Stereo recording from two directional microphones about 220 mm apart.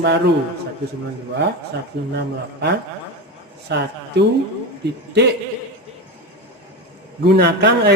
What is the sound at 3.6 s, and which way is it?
Speech, 50° right (ahead or behind).